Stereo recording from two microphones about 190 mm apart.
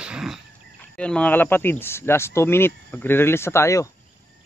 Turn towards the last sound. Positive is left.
turn(degrees=15)  # may be behind; listen again after turning